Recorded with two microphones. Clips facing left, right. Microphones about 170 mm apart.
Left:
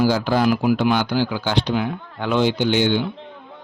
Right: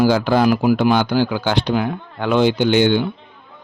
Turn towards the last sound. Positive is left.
turn(degrees=-55)  # may be behind; listen again after turning